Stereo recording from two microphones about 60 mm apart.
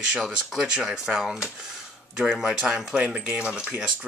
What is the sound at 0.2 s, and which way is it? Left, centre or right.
Speech, centre.